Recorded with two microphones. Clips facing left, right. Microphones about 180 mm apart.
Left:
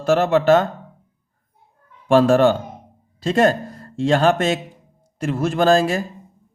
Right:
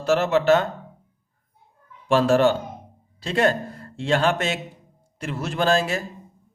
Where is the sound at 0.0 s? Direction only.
50° left (ahead or behind).